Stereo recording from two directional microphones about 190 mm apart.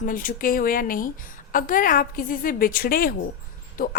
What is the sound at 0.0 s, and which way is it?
Speech, 45° left (ahead or behind).